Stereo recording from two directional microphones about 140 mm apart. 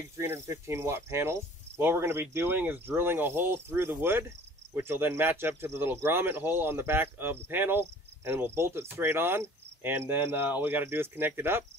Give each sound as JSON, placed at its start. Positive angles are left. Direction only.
{"t": 0.2, "sound": "speech", "side_deg": -20}